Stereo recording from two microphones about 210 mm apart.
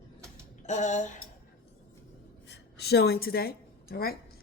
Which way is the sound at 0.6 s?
35° left (ahead or behind).